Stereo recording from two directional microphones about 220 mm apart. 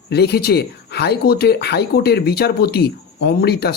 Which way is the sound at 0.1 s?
50° left (ahead or behind).